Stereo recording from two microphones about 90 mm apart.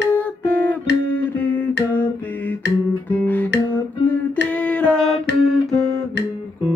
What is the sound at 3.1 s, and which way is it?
Music, 20° left (ahead or behind).